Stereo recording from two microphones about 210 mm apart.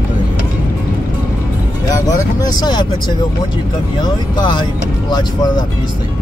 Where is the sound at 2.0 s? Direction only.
20° left (ahead or behind).